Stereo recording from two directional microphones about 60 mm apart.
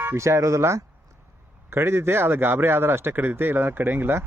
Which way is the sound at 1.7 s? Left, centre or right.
Right.